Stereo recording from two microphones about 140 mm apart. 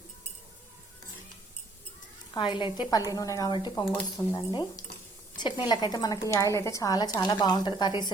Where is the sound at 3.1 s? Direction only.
25° left (ahead or behind).